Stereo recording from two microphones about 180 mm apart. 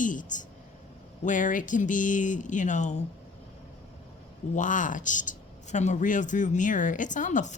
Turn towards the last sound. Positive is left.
turn(degrees=45)  # may be behind; listen again after turning